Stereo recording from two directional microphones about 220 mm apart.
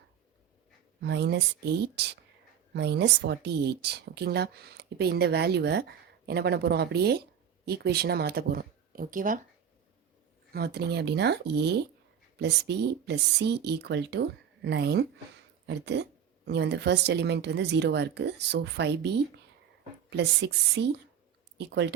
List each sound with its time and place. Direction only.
1.0 s speech: 50° right (ahead or behind)
10.5 s speech: 45° right (ahead or behind)